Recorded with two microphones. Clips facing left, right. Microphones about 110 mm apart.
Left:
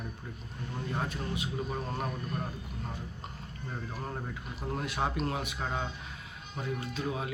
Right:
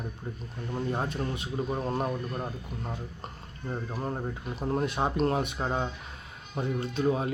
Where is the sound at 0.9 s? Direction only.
25° right (ahead or behind).